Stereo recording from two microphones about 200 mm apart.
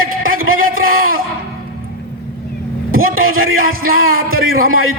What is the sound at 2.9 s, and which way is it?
A man's voice, 90° right.